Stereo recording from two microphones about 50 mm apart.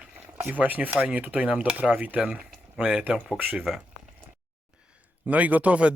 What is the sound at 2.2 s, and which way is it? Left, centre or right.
Speech, centre.